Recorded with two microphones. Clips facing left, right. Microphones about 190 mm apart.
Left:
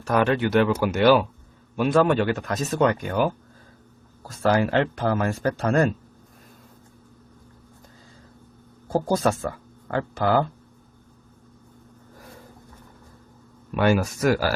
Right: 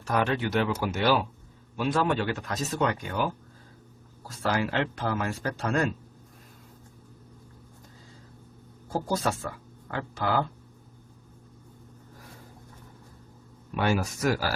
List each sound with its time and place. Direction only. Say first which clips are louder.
0.1 s speech: left 6 dB; 60° left (ahead or behind)
4.4 s speech: left 7 dB; 50° left (ahead or behind)
8.9 s speech: left 6 dB; 50° left (ahead or behind)
13.7 s speech: left 6 dB; 60° left (ahead or behind)